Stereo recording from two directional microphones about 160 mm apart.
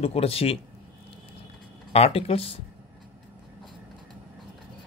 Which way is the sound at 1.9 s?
40° left (ahead or behind).